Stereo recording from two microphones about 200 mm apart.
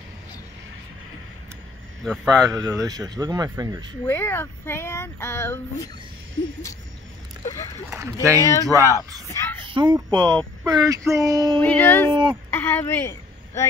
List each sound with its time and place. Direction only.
2.2 s speech: 15° right (ahead or behind)
4.0 s speech: 10° left (ahead or behind)
8.0 s speech: 15° right (ahead or behind)
8.4 s speech: 15° left (ahead or behind)
8.6 s speech: 15° right (ahead or behind)
9.3 s speech: 15° left (ahead or behind)
9.7 s speech: 25° right (ahead or behind)
11.6 s speech: 10° left (ahead or behind)
12.1 s speech: 25° right (ahead or behind)
12.4 s speech: 10° left (ahead or behind)